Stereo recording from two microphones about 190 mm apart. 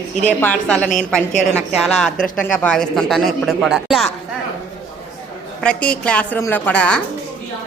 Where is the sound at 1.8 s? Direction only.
5° left (ahead or behind).